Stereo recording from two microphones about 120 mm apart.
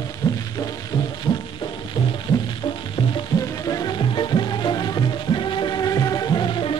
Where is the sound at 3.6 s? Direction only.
35° left (ahead or behind).